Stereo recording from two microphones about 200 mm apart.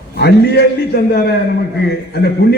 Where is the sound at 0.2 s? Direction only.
55° left (ahead or behind).